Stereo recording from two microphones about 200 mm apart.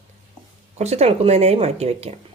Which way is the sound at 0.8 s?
35° right (ahead or behind).